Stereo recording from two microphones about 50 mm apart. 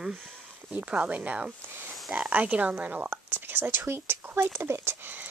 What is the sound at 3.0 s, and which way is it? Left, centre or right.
Speech, right.